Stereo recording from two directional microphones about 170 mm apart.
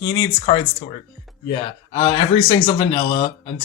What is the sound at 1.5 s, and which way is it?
Speech, 35° left (ahead or behind).